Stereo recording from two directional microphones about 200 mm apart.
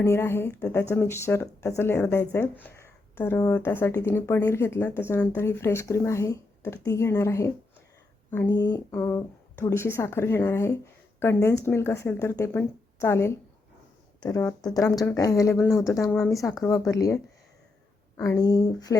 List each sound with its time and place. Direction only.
0.0 s speech: 15° left (ahead or behind)
16.4 s speech: centre (ahead or behind)
16.6 s speech: 15° left (ahead or behind)
18.2 s speech: 15° left (ahead or behind)